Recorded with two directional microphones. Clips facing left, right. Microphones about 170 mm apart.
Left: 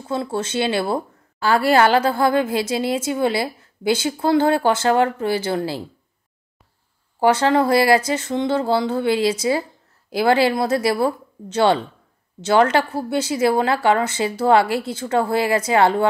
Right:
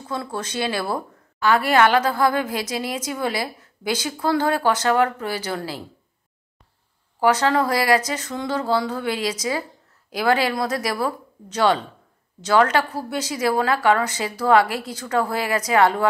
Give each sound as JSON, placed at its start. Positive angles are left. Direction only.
{"t": 0.1, "sound": "a woman's voice", "side_deg": 25}
{"t": 7.2, "sound": "a woman's voice", "side_deg": 25}